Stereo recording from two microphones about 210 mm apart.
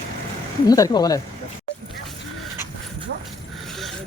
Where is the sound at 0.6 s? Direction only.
20° left (ahead or behind).